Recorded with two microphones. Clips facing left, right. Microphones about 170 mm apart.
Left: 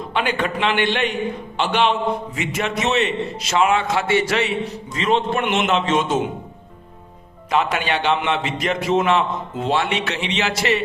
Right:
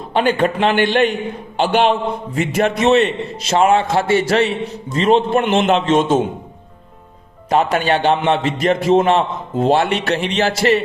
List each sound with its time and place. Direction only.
0.1 s a man's voice: 40° right (ahead or behind)
3.4 s a man's voice: 35° right (ahead or behind)
7.5 s a man's voice: 45° right (ahead or behind)